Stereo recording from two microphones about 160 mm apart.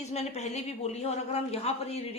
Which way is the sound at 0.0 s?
45° left (ahead or behind).